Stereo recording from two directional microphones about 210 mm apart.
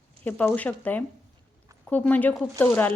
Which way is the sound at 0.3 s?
5° left (ahead or behind).